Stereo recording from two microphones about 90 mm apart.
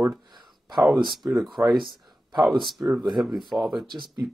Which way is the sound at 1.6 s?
10° right (ahead or behind).